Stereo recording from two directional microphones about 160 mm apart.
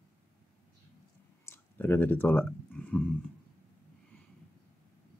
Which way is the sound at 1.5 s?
10° left (ahead or behind).